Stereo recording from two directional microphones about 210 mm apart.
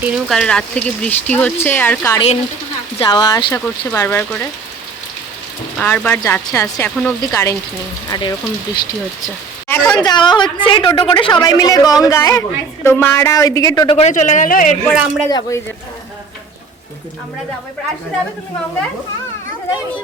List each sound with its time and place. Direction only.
0.0 s speech: centre (ahead or behind)
2.1 s a woman's voice: 30° left (ahead or behind); by 4.4 s 10° left (ahead or behind)
5.8 s a woman's voice: 10° left (ahead or behind)
13.9 s a woman's voice: 35° left (ahead or behind)
14.8 s speech: centre (ahead or behind)
15.3 s a woman's voice: 15° left (ahead or behind)